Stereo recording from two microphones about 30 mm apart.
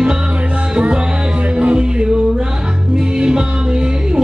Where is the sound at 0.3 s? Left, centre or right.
Right.